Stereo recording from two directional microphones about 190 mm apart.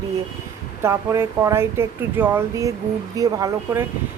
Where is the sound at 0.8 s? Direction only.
15° right (ahead or behind).